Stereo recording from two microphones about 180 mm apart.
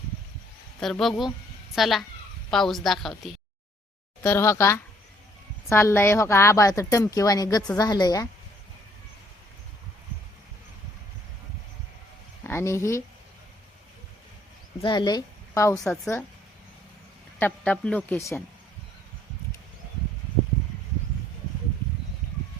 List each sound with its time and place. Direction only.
0.8 s a woman's voice: centre (ahead or behind)
4.2 s a woman's voice: 15° left (ahead or behind)
12.4 s speech: 15° left (ahead or behind)
14.8 s a woman's voice: 25° left (ahead or behind)
17.4 s a woman's voice: 5° left (ahead or behind)